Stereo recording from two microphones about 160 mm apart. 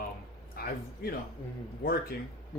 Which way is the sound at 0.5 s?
70° left (ahead or behind).